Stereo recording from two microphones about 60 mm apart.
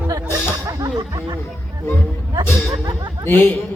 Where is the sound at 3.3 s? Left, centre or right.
Left.